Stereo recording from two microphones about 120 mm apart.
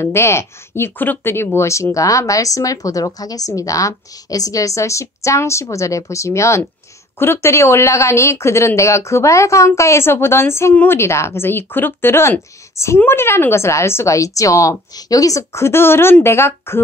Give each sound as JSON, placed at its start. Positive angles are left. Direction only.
{"t": 0.0, "sound": "a woman's voice", "side_deg": 20}